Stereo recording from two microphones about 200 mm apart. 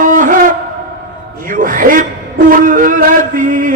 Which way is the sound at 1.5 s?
40° right (ahead or behind).